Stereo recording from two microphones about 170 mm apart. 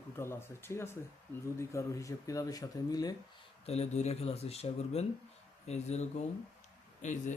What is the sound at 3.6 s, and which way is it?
Speech, 40° left (ahead or behind).